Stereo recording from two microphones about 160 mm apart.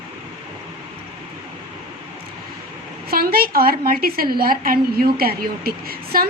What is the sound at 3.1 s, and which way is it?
A woman's voice, 65° right (ahead or behind).